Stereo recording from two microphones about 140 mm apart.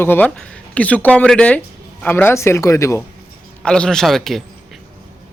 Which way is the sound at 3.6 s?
5° left (ahead or behind).